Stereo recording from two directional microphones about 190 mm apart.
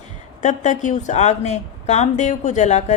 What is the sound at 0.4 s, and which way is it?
A woman's voice, 40° left (ahead or behind).